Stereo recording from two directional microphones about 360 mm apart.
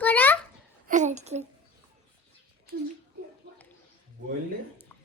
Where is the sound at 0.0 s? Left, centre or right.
Centre.